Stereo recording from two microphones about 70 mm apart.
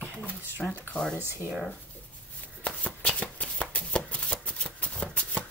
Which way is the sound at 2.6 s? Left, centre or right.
Centre.